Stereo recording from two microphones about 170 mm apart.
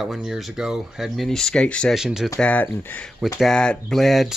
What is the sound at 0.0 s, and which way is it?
Speech, 5° right (ahead or behind).